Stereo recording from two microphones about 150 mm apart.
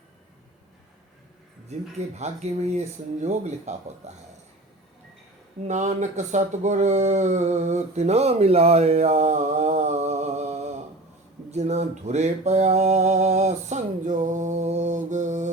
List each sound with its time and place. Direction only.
2.0 s speech: 50° right (ahead or behind)
5.6 s speech: 55° right (ahead or behind)
11.5 s a sound: 45° right (ahead or behind)